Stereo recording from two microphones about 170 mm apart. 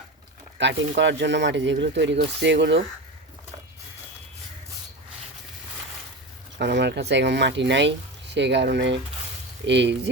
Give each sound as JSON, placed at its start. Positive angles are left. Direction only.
{"t": 0.6, "sound": "speech", "side_deg": -90}
{"t": 6.6, "sound": "speech", "side_deg": -90}